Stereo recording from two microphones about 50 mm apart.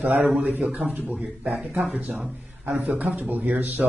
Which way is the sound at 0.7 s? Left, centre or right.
Right.